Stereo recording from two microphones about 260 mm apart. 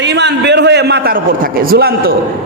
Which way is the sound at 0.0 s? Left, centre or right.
Right.